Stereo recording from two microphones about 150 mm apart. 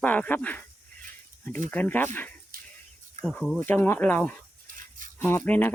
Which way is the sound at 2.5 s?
70° right (ahead or behind).